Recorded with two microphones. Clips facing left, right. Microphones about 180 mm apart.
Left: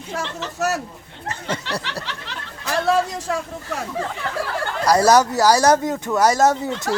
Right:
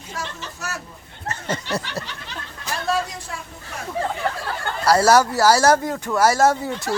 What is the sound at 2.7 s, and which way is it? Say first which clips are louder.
A man's voice: left 5 dB; 90° left.